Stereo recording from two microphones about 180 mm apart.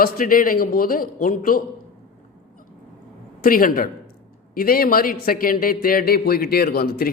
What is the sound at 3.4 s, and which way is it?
A man's voice, 55° left (ahead or behind).